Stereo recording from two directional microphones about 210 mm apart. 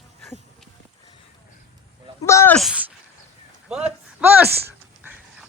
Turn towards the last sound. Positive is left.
turn(degrees=-10)  # may be behind; listen again after turning